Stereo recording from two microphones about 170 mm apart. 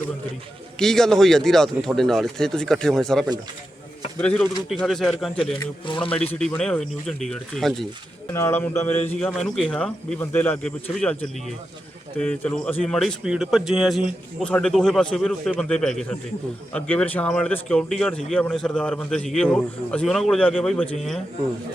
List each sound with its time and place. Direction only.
0.8 s a man's voice: 5° left (ahead or behind)
5.5 s speech: 30° left (ahead or behind)
6.4 s speech: 5° left (ahead or behind)
8.3 s a man's voice: 15° left (ahead or behind)